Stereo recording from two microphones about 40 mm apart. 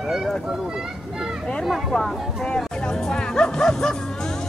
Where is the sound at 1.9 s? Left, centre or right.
Centre.